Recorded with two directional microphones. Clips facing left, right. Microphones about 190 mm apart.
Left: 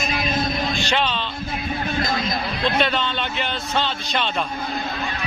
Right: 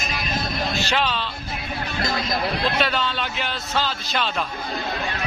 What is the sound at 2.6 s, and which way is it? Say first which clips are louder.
Speech: left 6 dB; 5° right (ahead or behind).